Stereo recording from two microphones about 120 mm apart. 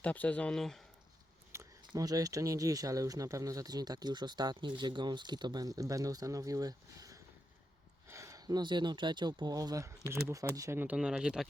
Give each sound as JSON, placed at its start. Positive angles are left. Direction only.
{"t": 0.0, "sound": "speech", "side_deg": 10}
{"t": 1.5, "sound": "a sound", "side_deg": -20}
{"t": 1.9, "sound": "speech", "side_deg": -30}
{"t": 10.8, "sound": "speech", "side_deg": -10}